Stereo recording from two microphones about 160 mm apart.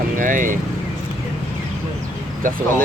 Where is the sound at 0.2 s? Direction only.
55° right (ahead or behind).